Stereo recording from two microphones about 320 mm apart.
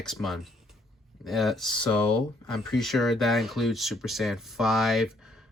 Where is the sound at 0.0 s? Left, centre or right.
Centre.